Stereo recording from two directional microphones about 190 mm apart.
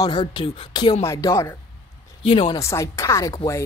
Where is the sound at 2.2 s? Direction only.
30° left (ahead or behind).